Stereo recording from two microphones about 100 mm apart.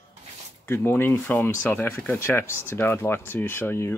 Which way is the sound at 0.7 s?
25° left (ahead or behind).